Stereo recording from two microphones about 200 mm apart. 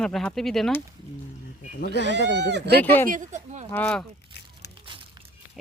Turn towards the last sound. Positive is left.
turn(degrees=60)  # may be behind; listen again after turning